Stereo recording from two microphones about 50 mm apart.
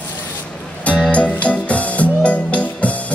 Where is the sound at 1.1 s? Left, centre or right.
Left.